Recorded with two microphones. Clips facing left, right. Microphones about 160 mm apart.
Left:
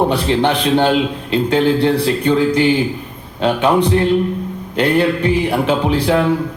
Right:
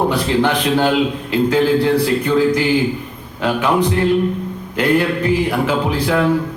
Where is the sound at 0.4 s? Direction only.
25° left (ahead or behind).